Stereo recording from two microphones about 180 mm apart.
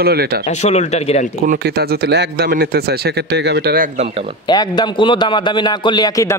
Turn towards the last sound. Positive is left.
turn(degrees=20)  # may be behind; listen again after turning